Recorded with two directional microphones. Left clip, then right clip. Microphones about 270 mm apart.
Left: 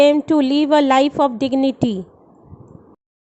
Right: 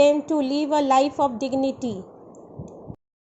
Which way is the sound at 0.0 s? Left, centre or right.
Left.